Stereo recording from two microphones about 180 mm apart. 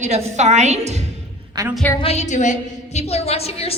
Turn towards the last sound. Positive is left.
turn(degrees=35)  # may be behind; listen again after turning